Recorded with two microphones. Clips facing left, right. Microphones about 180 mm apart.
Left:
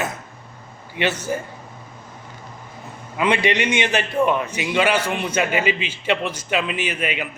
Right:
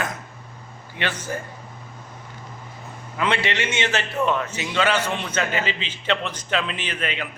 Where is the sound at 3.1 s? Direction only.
15° left (ahead or behind).